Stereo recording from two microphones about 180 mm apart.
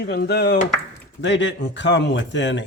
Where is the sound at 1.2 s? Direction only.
90° left.